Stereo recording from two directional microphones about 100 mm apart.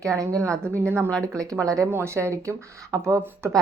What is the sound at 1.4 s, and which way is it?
A woman's voice, 35° right (ahead or behind).